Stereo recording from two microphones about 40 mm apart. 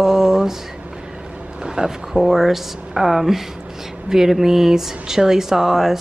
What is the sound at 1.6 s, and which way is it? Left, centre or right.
Speech, centre.